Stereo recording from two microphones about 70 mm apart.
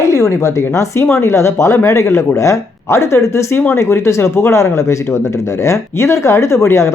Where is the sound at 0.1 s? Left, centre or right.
Left.